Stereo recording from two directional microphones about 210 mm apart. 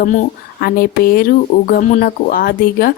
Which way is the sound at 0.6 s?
45° left (ahead or behind).